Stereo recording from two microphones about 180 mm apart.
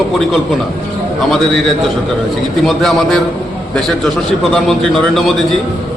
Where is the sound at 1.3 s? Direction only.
Centre (ahead or behind).